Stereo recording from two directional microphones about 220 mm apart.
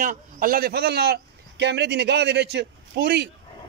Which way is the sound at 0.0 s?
40° right (ahead or behind).